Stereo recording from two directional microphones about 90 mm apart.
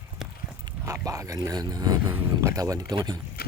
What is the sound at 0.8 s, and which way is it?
Speech, 40° right (ahead or behind).